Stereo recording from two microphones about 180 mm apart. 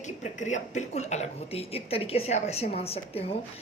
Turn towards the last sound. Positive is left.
turn(degrees=35)  # may be behind; listen again after turning